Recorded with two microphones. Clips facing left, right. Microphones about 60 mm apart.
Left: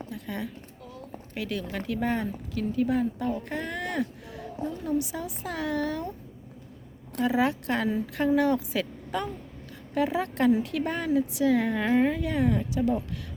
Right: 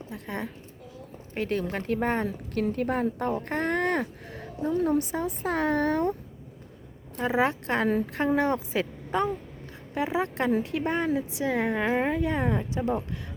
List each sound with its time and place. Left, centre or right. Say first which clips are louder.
0.1 s a woman's voice: right 3 dB; right
7.2 s a woman's voice: even; right